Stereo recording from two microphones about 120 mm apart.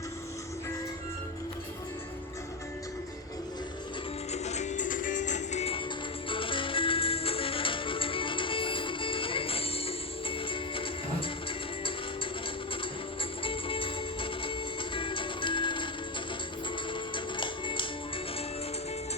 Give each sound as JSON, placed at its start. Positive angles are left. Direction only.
{"t": 4.3, "sound": "music", "side_deg": 70}
{"t": 6.2, "sound": "music", "side_deg": 45}
{"t": 13.4, "sound": "music", "side_deg": 45}
{"t": 17.2, "sound": "music", "side_deg": 45}